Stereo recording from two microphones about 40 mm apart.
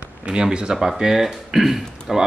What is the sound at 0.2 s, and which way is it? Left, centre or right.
Speech, right.